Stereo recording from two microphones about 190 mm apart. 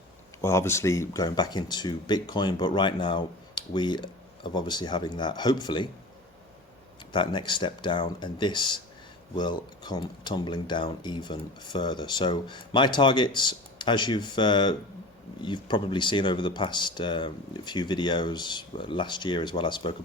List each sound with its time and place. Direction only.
0.4 s speech: 15° left (ahead or behind)
7.1 s speech: 25° left (ahead or behind)